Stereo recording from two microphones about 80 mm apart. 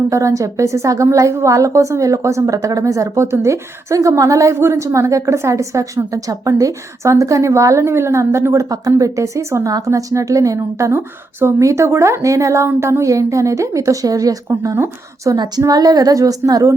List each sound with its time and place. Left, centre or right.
0.1 s a woman's voice: right
10.9 s speech: right
11.6 s a woman's voice: right
15.4 s a woman's voice: right